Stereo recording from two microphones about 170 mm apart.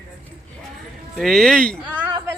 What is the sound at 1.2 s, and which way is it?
Speech, centre (ahead or behind).